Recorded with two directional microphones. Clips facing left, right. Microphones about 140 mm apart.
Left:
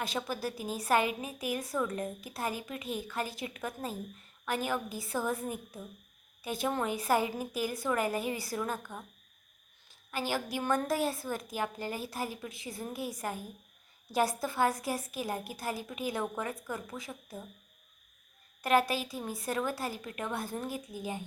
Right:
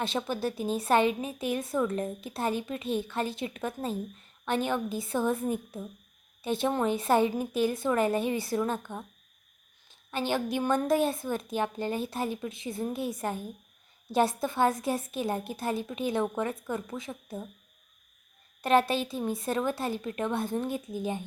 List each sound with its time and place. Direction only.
0.0 s a woman's voice: 25° right (ahead or behind)
18.6 s a woman's voice: 25° right (ahead or behind)